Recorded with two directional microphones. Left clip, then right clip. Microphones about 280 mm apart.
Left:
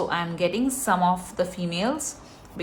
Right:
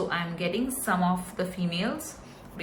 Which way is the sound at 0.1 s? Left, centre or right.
Centre.